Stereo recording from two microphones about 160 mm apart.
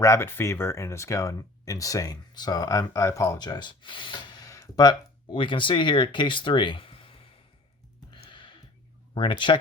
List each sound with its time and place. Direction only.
0.0 s speech: 15° left (ahead or behind); by 7.3 s 35° left (ahead or behind)
8.1 s gasp: 30° left (ahead or behind)
9.1 s speech: 30° left (ahead or behind)